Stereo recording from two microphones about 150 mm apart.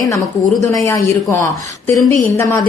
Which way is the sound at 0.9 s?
20° left (ahead or behind).